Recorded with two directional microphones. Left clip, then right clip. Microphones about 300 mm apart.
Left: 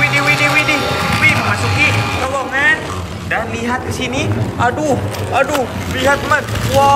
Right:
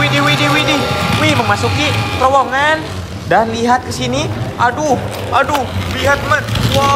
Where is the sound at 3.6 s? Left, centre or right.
Centre.